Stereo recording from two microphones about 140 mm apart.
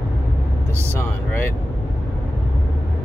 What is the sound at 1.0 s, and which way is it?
Speech, 15° left (ahead or behind).